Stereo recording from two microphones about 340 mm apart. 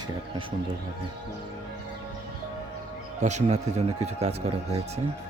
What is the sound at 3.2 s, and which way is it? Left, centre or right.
Speech, right.